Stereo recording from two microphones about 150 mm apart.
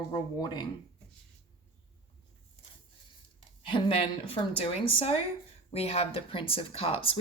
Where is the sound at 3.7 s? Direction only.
35° left (ahead or behind).